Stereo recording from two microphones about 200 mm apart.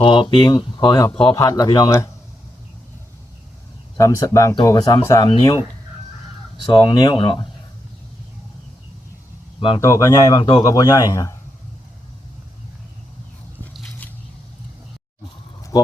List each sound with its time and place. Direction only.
0.0 s speech: 25° left (ahead or behind)
3.9 s speech: 15° left (ahead or behind)
6.7 s speech: 20° left (ahead or behind)
9.6 s speech: 25° left (ahead or behind)
9.8 s speech: 15° left (ahead or behind)
14.0 s squish: 5° left (ahead or behind)
15.7 s speech: 20° left (ahead or behind)